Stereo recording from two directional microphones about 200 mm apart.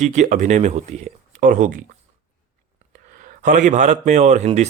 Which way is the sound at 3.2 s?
40° right (ahead or behind).